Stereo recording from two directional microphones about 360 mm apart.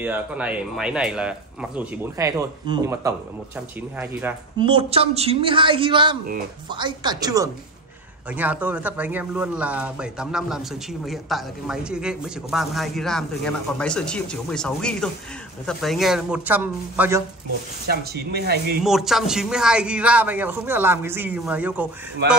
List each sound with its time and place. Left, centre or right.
0.0 s speech: centre
17.8 s speech: right
18.8 s speech: centre